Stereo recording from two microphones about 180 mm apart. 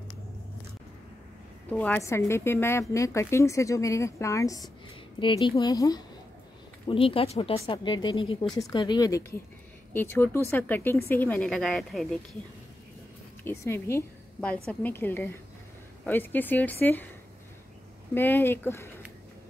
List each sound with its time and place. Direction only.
1.7 s speech: 10° left (ahead or behind)
13.4 s a woman's voice: 15° left (ahead or behind)
18.1 s speech: 10° left (ahead or behind)